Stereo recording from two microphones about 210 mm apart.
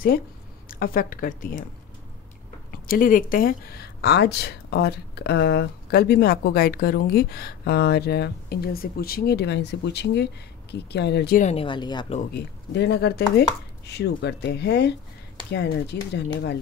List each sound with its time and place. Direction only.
0.7 s speech: 45° left (ahead or behind)
2.9 s speech: 40° left (ahead or behind)
11.4 s speech: 25° left (ahead or behind)
12.4 s speech: 55° left (ahead or behind)